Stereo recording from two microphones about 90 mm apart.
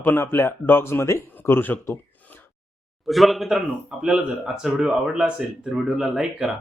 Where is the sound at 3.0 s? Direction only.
Centre (ahead or behind).